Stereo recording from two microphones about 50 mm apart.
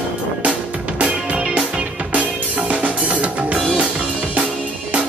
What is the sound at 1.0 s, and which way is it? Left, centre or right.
Music, right.